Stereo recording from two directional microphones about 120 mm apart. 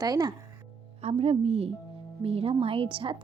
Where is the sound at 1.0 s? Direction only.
60° right (ahead or behind).